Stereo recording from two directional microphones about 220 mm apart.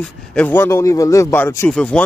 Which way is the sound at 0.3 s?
5° left (ahead or behind).